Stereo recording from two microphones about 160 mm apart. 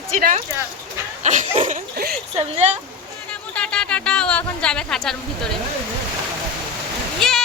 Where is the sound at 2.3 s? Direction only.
40° right (ahead or behind).